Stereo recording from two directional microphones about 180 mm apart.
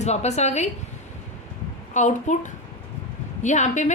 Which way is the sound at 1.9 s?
40° left (ahead or behind).